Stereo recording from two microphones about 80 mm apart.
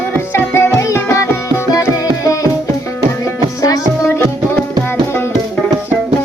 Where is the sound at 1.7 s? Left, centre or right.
Left.